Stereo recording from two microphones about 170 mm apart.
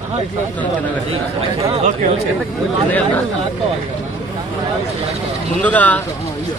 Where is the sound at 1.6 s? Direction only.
40° right (ahead or behind).